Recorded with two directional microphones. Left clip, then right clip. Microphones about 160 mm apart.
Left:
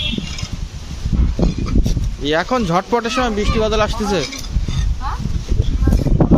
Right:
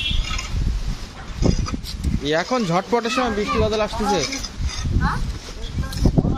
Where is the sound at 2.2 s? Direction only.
15° left (ahead or behind).